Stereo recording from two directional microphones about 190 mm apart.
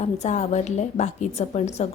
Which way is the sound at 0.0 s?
35° left (ahead or behind).